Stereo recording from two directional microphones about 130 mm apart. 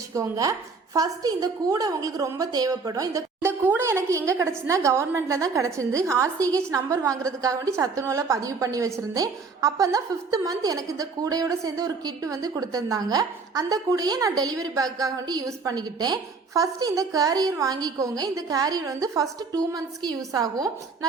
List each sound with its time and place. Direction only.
0.1 s a woman's voice: 25° right (ahead or behind)